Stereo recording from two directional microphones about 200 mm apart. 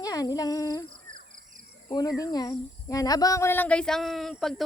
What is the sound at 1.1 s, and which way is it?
Insect, 40° right (ahead or behind).